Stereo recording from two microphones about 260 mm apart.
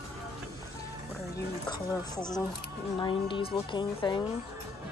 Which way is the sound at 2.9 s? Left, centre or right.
Centre.